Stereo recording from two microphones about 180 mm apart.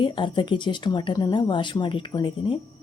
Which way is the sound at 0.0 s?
25° left (ahead or behind).